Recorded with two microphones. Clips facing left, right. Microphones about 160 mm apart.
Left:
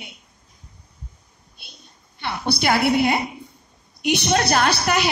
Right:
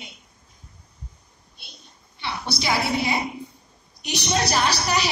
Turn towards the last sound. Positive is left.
turn(degrees=55)  # may be behind; listen again after turning